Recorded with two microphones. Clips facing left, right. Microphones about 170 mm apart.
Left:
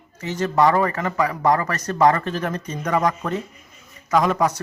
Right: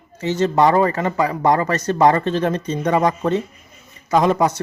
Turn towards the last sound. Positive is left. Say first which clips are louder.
# right 3 dB
turn(degrees=-30)  # may be behind; listen again after turning